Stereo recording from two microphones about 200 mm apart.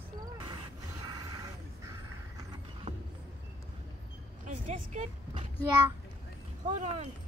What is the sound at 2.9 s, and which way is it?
Vehicle, 20° right (ahead or behind).